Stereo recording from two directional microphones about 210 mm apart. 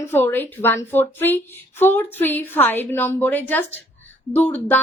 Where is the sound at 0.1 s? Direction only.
10° left (ahead or behind).